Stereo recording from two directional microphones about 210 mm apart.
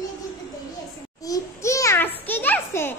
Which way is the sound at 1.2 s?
15° left (ahead or behind).